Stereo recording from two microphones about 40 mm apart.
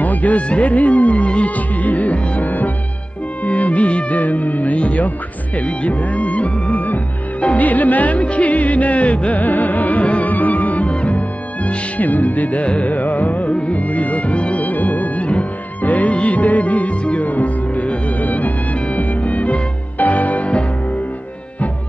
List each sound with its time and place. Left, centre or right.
0.0 s music: left
3.4 s speech: left
7.4 s music: left